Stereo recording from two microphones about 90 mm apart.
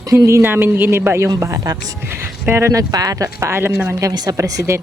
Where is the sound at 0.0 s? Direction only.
35° right (ahead or behind).